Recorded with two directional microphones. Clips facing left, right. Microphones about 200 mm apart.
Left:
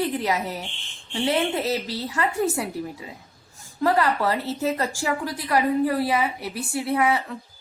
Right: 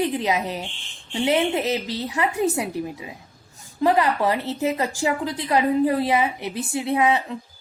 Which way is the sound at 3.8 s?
15° right (ahead or behind).